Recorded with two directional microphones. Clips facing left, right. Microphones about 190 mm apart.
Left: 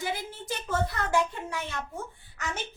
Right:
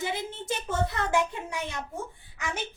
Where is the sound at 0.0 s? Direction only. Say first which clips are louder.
Right 1 dB; 25° right (ahead or behind).